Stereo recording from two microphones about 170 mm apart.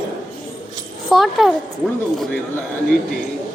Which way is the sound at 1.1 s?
Centre (ahead or behind).